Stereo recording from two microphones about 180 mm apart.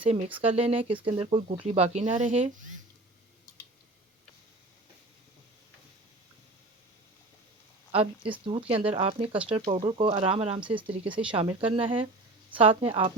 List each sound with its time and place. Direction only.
0.0 s speech: 35° right (ahead or behind)
7.9 s speech: 30° right (ahead or behind)